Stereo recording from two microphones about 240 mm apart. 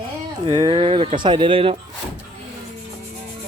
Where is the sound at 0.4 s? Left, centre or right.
Centre.